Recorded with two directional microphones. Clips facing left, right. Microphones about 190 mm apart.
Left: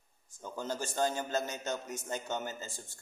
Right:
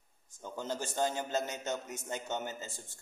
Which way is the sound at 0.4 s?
20° right (ahead or behind).